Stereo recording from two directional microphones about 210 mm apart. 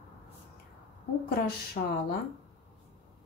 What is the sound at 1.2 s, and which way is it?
Speech, 50° left (ahead or behind).